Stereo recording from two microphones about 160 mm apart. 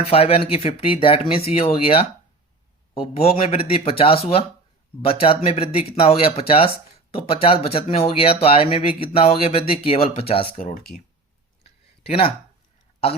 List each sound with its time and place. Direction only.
0.1 s speech: 35° left (ahead or behind)
10.6 s speech: 55° left (ahead or behind)
12.0 s speech: 40° left (ahead or behind)